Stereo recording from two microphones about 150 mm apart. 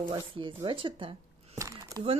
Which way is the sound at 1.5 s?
20° right (ahead or behind).